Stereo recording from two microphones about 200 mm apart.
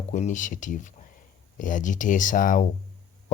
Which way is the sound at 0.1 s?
35° left (ahead or behind).